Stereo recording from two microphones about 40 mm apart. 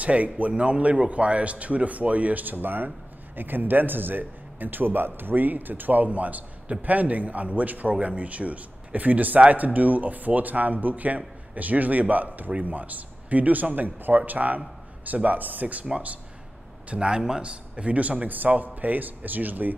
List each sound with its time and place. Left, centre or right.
0.0 s a man's voice: right
16.9 s a man's voice: right